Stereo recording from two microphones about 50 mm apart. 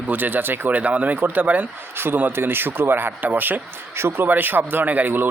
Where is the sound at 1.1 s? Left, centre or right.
Right.